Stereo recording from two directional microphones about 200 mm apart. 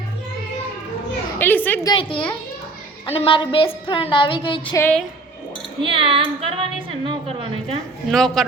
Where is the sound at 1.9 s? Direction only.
25° left (ahead or behind).